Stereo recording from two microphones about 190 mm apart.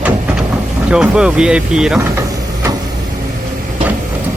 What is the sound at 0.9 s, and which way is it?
Speech, 5° right (ahead or behind).